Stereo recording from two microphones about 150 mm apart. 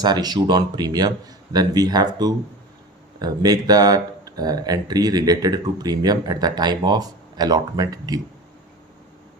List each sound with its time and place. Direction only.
0.0 s speech: 25° right (ahead or behind)